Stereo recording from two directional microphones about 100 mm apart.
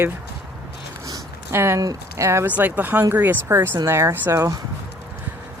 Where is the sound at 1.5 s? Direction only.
25° right (ahead or behind).